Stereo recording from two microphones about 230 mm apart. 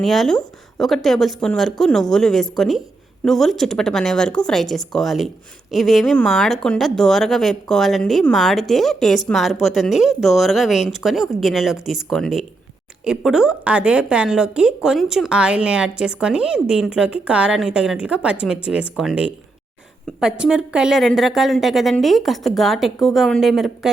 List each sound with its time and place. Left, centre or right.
0.0 s a woman's voice: centre